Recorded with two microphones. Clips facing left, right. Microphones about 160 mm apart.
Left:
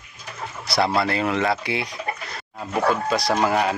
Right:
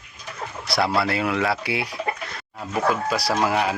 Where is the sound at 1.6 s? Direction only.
5° right (ahead or behind).